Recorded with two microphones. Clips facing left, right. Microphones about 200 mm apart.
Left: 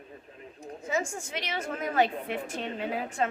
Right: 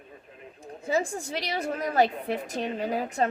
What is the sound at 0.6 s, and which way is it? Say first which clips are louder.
A woman's voice: right 4 dB; 30° right (ahead or behind).